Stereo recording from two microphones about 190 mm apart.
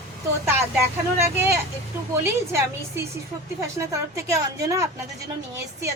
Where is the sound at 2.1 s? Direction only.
15° right (ahead or behind).